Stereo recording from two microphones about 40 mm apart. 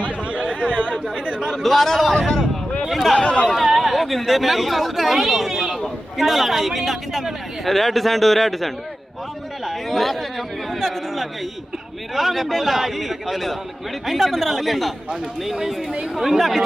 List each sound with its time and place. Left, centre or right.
0.0 s chatter: right
1.4 s a man's voice: centre
3.2 s speech: left
3.4 s a man's voice: centre
9.6 s chatter: centre
12.1 s a man's voice: centre